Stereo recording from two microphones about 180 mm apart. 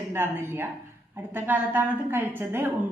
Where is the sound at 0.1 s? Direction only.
10° right (ahead or behind).